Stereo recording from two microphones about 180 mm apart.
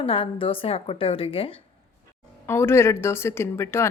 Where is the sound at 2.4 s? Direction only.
15° left (ahead or behind).